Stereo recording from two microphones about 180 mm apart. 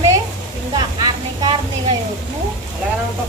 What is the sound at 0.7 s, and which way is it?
A woman's voice, 25° right (ahead or behind).